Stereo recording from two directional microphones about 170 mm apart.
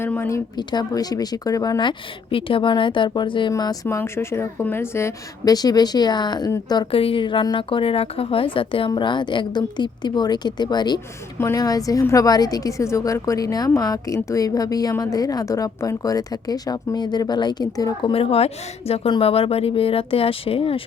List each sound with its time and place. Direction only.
0.0 s a woman's voice: 15° left (ahead or behind)
18.1 s a woman's voice: 35° left (ahead or behind)